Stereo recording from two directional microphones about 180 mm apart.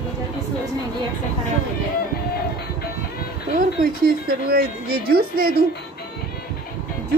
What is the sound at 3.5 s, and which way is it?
Speech, 55° right (ahead or behind).